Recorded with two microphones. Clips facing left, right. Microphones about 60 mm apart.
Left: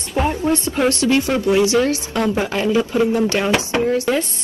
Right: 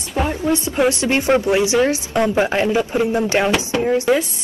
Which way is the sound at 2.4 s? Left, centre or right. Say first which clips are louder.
Right 1 dB; right.